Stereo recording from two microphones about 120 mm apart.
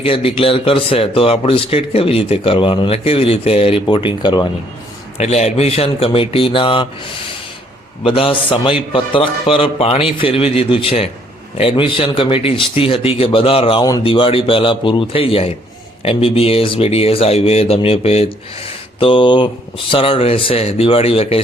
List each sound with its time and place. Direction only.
0.0 s speech: 50° left (ahead or behind)
5.1 s speech: 65° left (ahead or behind); by 6.8 s 45° left (ahead or behind)
8.0 s speech: 45° left (ahead or behind)
18.9 s speech: 45° left (ahead or behind)